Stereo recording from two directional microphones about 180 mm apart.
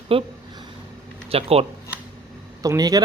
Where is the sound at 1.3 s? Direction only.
35° right (ahead or behind).